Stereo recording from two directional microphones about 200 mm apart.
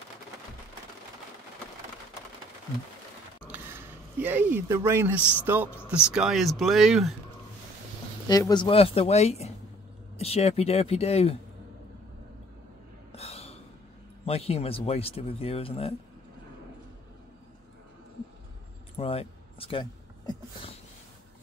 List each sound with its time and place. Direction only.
3.4 s a sound: 10° right (ahead or behind)
5.4 s a man's voice: 10° right (ahead or behind)
8.3 s speech: 20° left (ahead or behind)
13.1 s gasp: 30° left (ahead or behind)
14.2 s speech: 30° left (ahead or behind)
18.9 s a sound: 30° left (ahead or behind)